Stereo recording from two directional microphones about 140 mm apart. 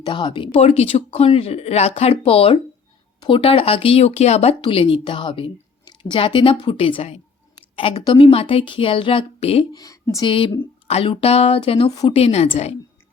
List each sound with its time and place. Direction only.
0.0 s speech: 35° left (ahead or behind); by 4.5 s 50° left (ahead or behind)
4.6 s a woman's voice: 40° left (ahead or behind)
9.7 s speech: 25° left (ahead or behind)
10.8 s speech: 45° left (ahead or behind)